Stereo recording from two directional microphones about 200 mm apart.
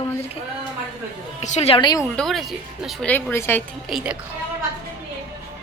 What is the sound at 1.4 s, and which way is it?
Speech, 35° left (ahead or behind).